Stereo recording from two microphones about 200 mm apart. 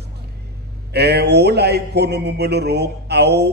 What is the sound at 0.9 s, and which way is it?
A man's voice, 55° right (ahead or behind).